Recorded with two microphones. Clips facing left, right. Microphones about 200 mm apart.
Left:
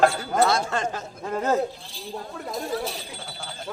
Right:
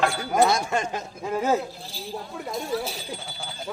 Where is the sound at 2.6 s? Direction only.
Centre (ahead or behind).